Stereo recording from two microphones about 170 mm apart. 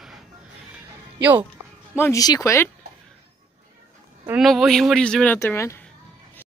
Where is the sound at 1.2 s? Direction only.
10° right (ahead or behind).